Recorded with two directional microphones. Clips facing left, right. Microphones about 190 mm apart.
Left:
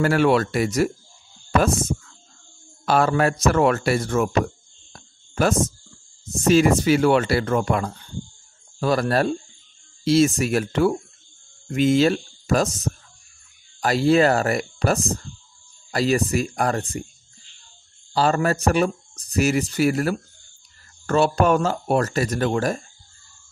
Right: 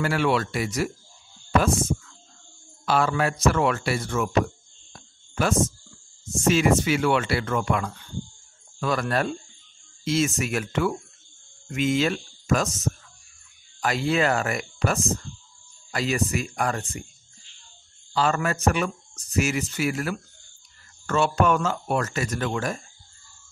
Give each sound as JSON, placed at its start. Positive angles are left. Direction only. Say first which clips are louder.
{"t": 0.0, "sound": "speech", "louder": "left 5 dB", "side_deg": 45}
{"t": 4.9, "sound": "a sound", "louder": "left 4 dB", "side_deg": 40}
{"t": 6.3, "sound": "speech", "louder": "left 4 dB", "side_deg": 35}
{"t": 18.1, "sound": "speech", "louder": "left 4 dB", "side_deg": 35}